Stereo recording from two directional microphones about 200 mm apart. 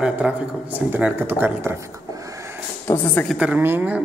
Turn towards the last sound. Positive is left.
turn(degrees=-10)  # may be behind; listen again after turning